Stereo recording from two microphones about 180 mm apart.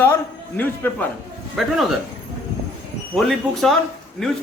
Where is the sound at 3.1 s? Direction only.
Centre (ahead or behind).